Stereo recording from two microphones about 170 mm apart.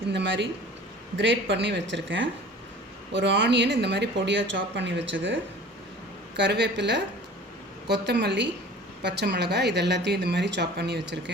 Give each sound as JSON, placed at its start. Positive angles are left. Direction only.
{"t": 0.1, "sound": "speech", "side_deg": -90}